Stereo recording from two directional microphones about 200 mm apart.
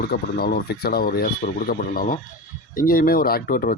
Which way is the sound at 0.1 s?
50° left (ahead or behind).